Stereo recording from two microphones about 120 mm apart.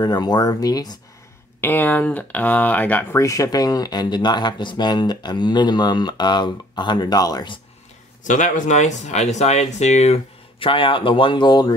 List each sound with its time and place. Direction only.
0.0 s speech: 35° left (ahead or behind)
1.6 s speech: 15° left (ahead or behind)
3.2 s speech: 25° left (ahead or behind)
8.2 s speech: 90° left; by 11.7 s 35° left (ahead or behind)